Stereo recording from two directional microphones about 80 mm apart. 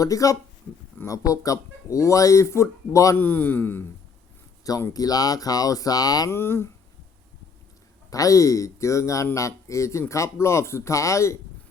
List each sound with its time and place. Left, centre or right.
0.0 s speech: left
3.2 s a man's voice: left
4.9 s speech: left
6.3 s speech: left
8.1 s speech: left